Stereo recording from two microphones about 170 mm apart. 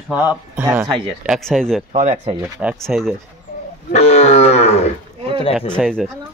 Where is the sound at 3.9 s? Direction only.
40° left (ahead or behind).